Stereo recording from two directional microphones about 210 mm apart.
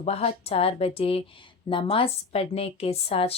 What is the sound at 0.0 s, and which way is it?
A woman's voice, 30° left (ahead or behind).